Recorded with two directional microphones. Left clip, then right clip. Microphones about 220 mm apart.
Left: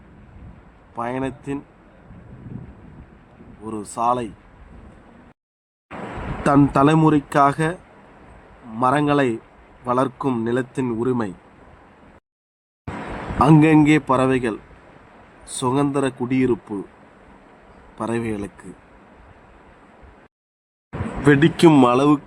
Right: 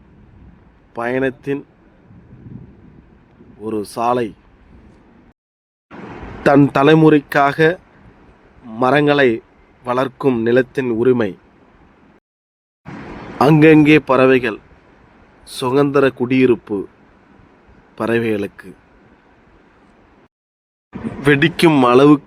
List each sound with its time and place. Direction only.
0.9 s a man's voice: 30° right (ahead or behind)
3.7 s a man's voice: 30° right (ahead or behind)
6.4 s a man's voice: 30° right (ahead or behind)
8.8 s a man's voice: 30° right (ahead or behind)
13.4 s a man's voice: 30° right (ahead or behind)
17.9 s a man's voice: 30° right (ahead or behind)
21.2 s a man's voice: 35° right (ahead or behind)